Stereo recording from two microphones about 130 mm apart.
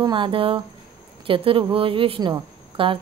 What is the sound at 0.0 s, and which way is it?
Speech, 40° right (ahead or behind).